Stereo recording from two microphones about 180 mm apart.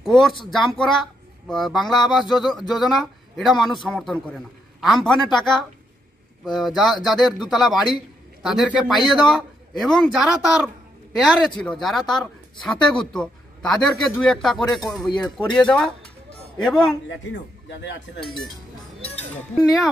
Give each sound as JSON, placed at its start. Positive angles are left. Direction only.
{"t": 0.0, "sound": "a man's voice", "side_deg": 0}
{"t": 17.3, "sound": "a man's voice", "side_deg": 90}